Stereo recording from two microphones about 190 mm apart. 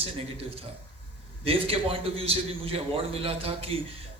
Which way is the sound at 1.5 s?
30° right (ahead or behind).